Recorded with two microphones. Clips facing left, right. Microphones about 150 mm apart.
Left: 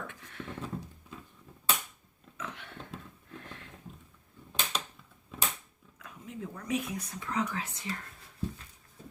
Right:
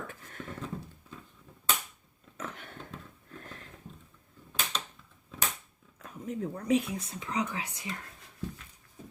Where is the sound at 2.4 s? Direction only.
45° right (ahead or behind).